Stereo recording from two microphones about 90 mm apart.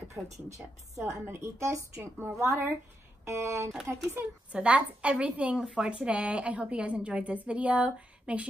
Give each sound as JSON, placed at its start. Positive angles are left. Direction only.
{"t": 0.1, "sound": "a woman's voice", "side_deg": -35}
{"t": 4.1, "sound": "a woman's voice", "side_deg": -15}